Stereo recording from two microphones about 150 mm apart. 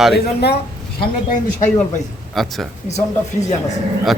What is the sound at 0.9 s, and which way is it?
Speech, 60° left (ahead or behind).